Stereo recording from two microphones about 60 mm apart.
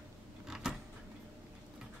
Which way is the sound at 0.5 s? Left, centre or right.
Centre.